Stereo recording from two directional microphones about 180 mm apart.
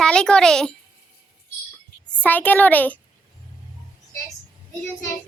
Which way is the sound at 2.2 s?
10° left (ahead or behind).